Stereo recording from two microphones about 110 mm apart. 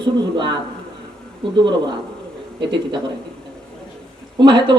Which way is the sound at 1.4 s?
50° right (ahead or behind).